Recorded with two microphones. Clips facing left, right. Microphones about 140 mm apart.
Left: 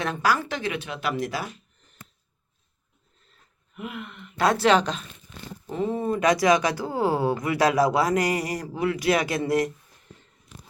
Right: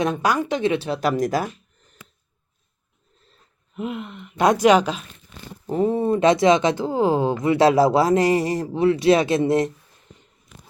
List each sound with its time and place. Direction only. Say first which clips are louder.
0.0 s speech: right 4 dB; 20° right (ahead or behind); by 1.5 s 45° right (ahead or behind)
3.8 s speech: right 7 dB; 25° right (ahead or behind); by 5.0 s 10° right (ahead or behind)
5.6 s speech: right 6 dB; 35° right (ahead or behind)